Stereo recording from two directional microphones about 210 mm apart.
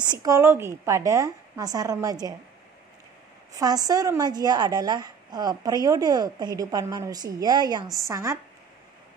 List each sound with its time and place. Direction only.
0.1 s a woman's voice: 15° right (ahead or behind)
3.5 s a woman's voice: 15° right (ahead or behind)